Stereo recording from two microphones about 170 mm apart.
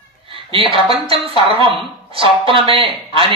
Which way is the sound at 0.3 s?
30° right (ahead or behind).